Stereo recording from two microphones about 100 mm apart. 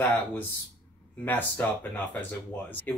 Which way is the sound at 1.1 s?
15° left (ahead or behind).